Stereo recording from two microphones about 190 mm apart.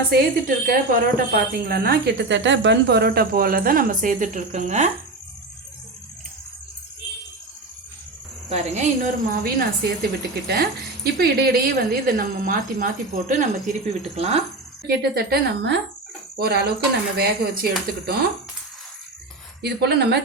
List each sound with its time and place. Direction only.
0.1 s a woman's voice: 50° right (ahead or behind)
8.4 s speech: 35° right (ahead or behind)
9.3 s a woman's voice: 55° right (ahead or behind)
14.0 s speech: 35° right (ahead or behind)
14.8 s a woman's voice: 55° right (ahead or behind)
19.6 s a woman's voice: 60° right (ahead or behind)